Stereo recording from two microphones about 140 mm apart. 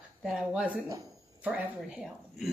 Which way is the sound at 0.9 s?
25° right (ahead or behind).